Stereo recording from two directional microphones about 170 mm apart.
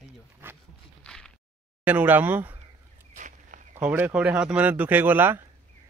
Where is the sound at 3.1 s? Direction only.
45° right (ahead or behind).